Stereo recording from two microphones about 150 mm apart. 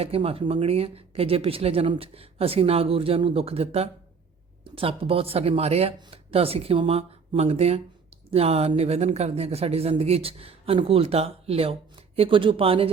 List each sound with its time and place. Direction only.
0.0 s speech: 40° right (ahead or behind)